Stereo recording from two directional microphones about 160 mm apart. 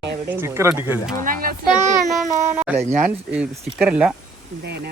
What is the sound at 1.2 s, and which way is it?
Speech, 60° right (ahead or behind).